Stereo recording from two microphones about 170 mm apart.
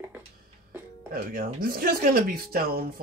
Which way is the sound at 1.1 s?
60° right (ahead or behind).